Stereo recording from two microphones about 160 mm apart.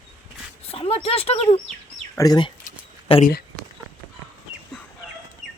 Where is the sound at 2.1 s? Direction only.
25° left (ahead or behind).